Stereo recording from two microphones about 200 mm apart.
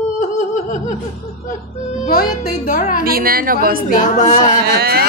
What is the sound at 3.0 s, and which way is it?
Speech, 45° right (ahead or behind).